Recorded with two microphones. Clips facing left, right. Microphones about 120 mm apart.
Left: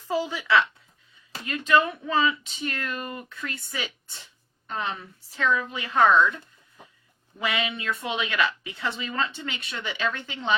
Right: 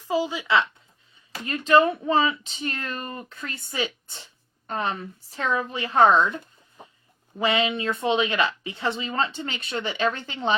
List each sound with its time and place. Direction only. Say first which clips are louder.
0.1 s speech: right 1 dB; 15° right (ahead or behind)
1.5 s speech: right 4 dB; 30° right (ahead or behind)